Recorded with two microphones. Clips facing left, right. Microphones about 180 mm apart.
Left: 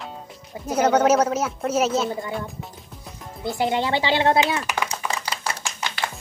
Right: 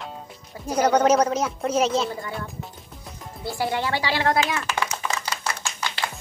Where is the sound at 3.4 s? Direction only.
20° left (ahead or behind).